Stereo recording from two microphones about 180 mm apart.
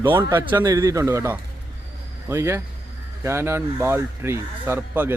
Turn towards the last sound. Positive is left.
turn(degrees=-10)  # may be behind; listen again after turning